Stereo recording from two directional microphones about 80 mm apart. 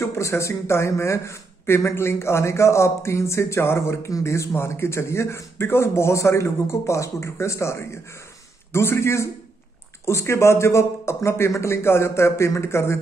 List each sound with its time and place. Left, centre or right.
0.0 s speech: left